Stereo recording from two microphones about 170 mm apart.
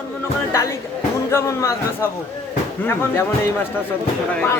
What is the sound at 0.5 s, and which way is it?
Speech, 15° left (ahead or behind).